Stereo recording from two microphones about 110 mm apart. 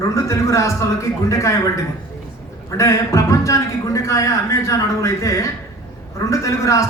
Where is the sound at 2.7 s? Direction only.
25° left (ahead or behind).